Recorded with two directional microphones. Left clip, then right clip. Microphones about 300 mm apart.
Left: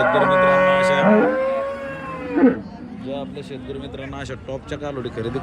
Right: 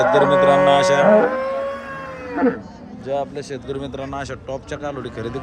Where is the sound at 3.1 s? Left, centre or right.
Right.